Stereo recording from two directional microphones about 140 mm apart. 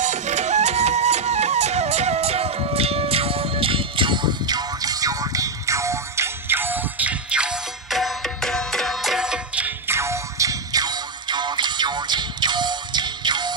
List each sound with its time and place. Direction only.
0.0 s music: 55° right (ahead or behind); by 9.7 s 5° right (ahead or behind)
9.8 s music: 20° right (ahead or behind)